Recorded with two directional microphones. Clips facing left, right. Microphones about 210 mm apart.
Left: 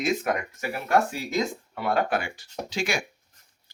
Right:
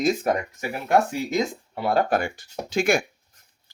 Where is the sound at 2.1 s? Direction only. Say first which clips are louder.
Right 4 dB; 45° right (ahead or behind).